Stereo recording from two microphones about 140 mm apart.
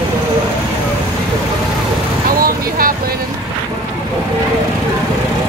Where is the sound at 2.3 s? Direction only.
90° right.